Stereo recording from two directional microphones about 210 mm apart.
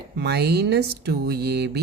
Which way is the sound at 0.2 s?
50° right (ahead or behind).